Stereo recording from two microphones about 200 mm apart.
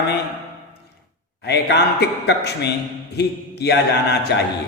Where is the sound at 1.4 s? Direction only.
55° left (ahead or behind).